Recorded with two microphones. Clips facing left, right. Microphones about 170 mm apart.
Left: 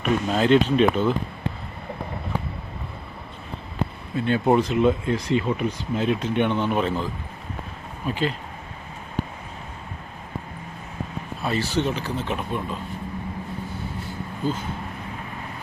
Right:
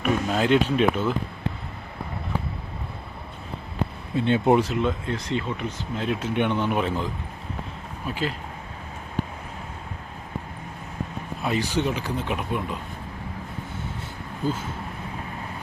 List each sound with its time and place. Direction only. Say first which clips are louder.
0.0 s speech: left 1 dB; 5° right (ahead or behind)
4.1 s speech: right 1 dB; 25° right (ahead or behind)
4.7 s speech: left 5 dB; 10° left (ahead or behind)
6.1 s speech: left 1 dB; 10° right (ahead or behind)
11.4 s speech: left 1 dB; 15° right (ahead or behind)